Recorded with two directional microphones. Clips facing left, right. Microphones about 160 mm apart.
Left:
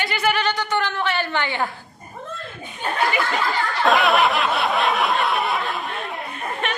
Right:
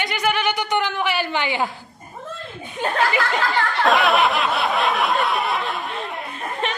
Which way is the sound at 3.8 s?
Centre (ahead or behind).